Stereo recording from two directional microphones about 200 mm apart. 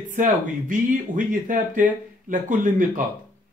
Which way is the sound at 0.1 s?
40° right (ahead or behind).